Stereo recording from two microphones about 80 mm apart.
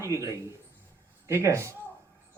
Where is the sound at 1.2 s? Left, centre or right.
Right.